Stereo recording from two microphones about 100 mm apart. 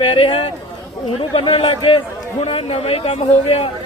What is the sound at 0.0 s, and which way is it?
A man's voice, 65° left (ahead or behind).